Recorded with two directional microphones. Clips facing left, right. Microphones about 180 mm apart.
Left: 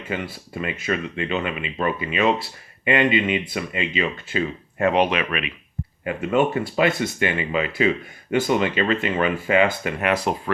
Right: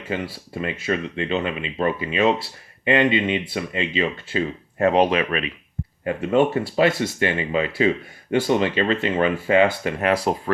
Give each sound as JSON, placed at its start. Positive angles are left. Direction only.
{"t": 0.1, "sound": "speech", "side_deg": -30}